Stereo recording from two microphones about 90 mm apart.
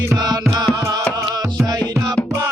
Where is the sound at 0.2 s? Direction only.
50° right (ahead or behind).